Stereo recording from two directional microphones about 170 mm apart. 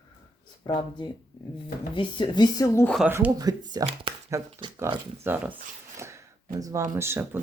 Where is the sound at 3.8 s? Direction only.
35° right (ahead or behind).